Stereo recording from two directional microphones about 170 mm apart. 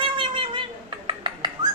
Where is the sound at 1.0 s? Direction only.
30° right (ahead or behind).